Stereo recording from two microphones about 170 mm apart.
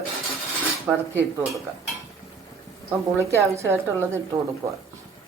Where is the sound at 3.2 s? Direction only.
15° right (ahead or behind).